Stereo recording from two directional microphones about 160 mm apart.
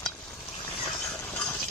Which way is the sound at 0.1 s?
20° left (ahead or behind).